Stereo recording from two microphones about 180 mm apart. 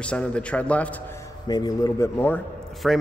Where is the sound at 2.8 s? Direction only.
Centre (ahead or behind).